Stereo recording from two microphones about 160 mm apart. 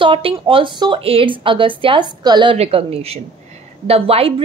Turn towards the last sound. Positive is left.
turn(degrees=-35)  # may be behind; listen again after turning